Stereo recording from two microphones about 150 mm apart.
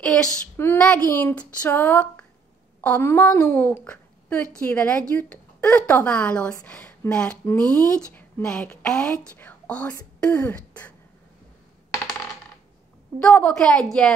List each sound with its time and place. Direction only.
0.0 s a woman's voice: 5° left (ahead or behind)
13.2 s a woman's voice: 5° left (ahead or behind)